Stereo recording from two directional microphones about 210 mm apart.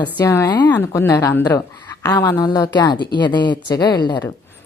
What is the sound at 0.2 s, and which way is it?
A woman's voice, 15° left (ahead or behind).